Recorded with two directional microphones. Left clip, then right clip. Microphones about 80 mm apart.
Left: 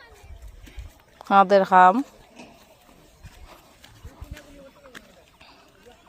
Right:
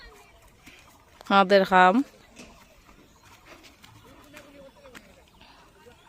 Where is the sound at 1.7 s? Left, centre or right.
Right.